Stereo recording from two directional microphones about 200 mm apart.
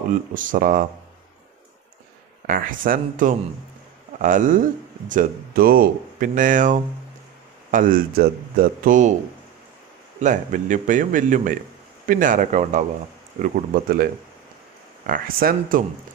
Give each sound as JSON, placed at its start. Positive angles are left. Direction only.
{"t": 0.3, "sound": "speech", "side_deg": -40}
{"t": 2.4, "sound": "speech", "side_deg": -45}
{"t": 10.2, "sound": "speech", "side_deg": -40}
{"t": 15.0, "sound": "speech", "side_deg": -45}